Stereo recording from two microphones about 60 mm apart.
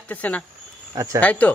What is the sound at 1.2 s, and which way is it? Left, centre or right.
Speech, left.